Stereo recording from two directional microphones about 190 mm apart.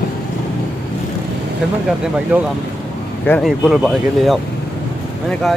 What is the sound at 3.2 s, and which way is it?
Speech, 5° left (ahead or behind).